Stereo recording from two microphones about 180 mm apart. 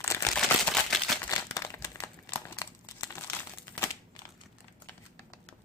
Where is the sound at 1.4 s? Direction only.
15° left (ahead or behind).